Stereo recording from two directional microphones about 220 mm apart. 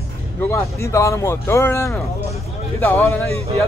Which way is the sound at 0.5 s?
15° left (ahead or behind).